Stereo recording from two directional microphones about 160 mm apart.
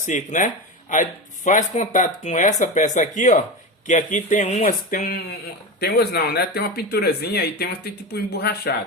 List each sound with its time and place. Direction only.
0.0 s speech: 50° left (ahead or behind)
5.8 s speech: 80° left